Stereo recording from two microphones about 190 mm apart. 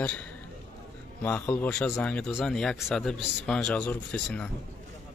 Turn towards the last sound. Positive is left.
turn(degrees=5)  # may be behind; listen again after turning